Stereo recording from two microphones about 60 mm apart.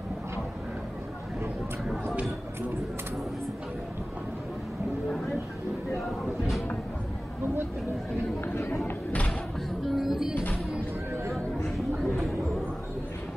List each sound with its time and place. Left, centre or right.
8.5 s speech: left
9.8 s music: centre